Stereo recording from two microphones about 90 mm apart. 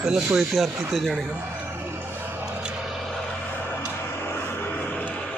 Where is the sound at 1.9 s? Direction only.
25° right (ahead or behind).